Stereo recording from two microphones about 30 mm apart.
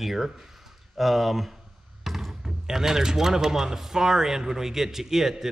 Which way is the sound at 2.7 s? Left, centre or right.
Centre.